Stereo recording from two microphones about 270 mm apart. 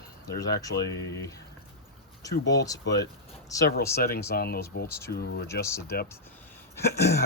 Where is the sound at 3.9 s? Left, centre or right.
Left.